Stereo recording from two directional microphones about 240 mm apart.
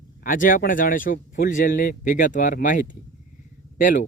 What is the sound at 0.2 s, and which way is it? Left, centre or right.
Speech, left.